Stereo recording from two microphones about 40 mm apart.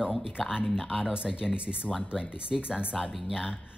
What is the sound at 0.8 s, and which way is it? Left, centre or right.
Speech, centre.